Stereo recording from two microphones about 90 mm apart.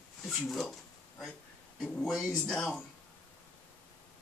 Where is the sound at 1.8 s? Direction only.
Centre (ahead or behind).